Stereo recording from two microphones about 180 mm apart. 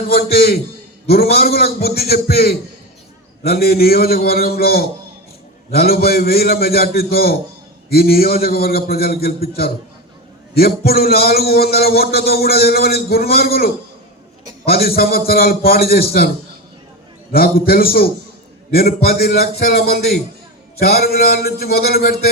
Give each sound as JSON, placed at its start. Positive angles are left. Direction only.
{"t": 0.1, "sound": "a man's voice", "side_deg": 60}
{"t": 17.3, "sound": "a man's voice", "side_deg": 55}